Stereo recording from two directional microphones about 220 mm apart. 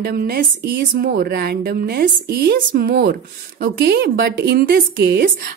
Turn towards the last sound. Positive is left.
turn(degrees=-50)  # may be behind; listen again after turning